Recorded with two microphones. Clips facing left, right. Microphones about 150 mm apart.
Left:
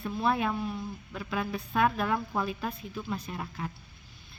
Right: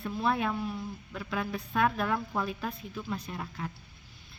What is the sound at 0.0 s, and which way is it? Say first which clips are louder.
Speech: left 1 dB; 5° left (ahead or behind).